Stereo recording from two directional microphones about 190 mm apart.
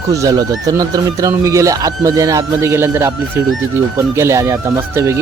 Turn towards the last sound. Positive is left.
turn(degrees=-15)  # may be behind; listen again after turning